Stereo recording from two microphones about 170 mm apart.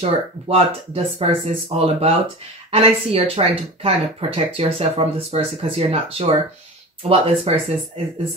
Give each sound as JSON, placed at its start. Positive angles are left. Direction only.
{"t": 0.0, "sound": "speech", "side_deg": -35}